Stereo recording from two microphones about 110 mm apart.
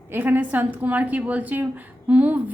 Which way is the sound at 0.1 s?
15° right (ahead or behind).